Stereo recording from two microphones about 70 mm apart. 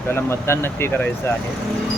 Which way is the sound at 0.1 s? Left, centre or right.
Left.